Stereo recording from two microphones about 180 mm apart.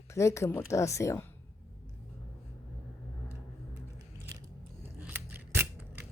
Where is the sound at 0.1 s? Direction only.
15° left (ahead or behind).